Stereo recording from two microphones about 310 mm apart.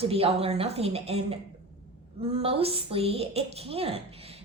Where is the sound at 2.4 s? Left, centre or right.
Centre.